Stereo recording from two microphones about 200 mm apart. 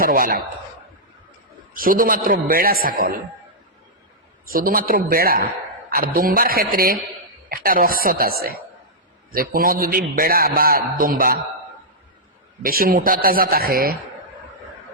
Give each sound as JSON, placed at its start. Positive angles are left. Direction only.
{"t": 0.0, "sound": "a man's voice", "side_deg": -45}
{"t": 1.7, "sound": "a man's voice", "side_deg": -45}
{"t": 4.5, "sound": "a man's voice", "side_deg": -45}
{"t": 12.6, "sound": "a man's voice", "side_deg": -45}